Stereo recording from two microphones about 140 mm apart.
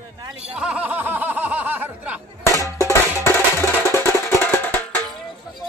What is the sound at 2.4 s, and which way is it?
Music, 25° left (ahead or behind).